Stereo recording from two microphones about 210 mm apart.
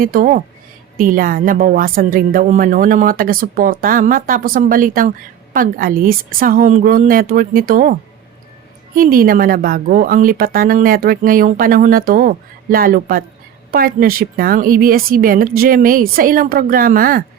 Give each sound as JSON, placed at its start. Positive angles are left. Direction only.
{"t": 0.0, "sound": "a woman's voice", "side_deg": -40}
{"t": 9.0, "sound": "a woman's voice", "side_deg": -45}